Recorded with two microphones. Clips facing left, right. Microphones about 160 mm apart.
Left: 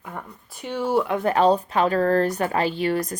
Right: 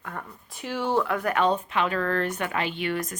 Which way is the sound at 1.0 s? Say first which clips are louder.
Left 5 dB; 20° left (ahead or behind).